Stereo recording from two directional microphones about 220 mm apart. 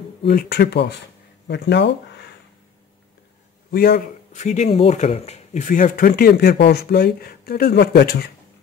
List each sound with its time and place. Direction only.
0.3 s speech: 45° left (ahead or behind)
3.7 s speech: 45° left (ahead or behind)